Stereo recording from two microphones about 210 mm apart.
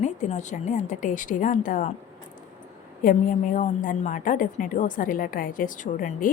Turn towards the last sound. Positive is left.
turn(degrees=40)  # may be behind; listen again after turning